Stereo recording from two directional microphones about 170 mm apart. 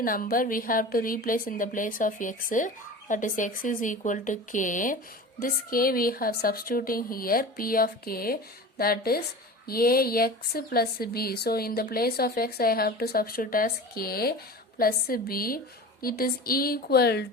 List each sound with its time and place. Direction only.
0.0 s a woman's voice: 55° left (ahead or behind); by 17.2 s 70° left (ahead or behind)